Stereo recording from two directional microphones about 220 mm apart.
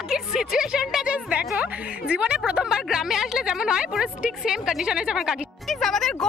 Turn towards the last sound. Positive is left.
turn(degrees=0)  # may be behind; listen again after turning